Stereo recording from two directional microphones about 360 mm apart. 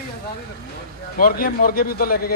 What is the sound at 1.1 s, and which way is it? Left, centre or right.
A man's voice, left.